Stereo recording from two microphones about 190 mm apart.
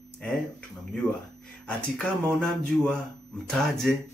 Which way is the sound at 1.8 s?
5° left (ahead or behind).